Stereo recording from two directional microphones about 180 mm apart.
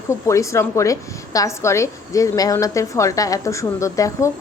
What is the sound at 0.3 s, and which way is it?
A woman's voice, 15° left (ahead or behind).